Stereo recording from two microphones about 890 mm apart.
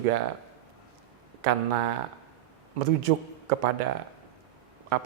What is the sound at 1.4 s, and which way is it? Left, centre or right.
Speech, right.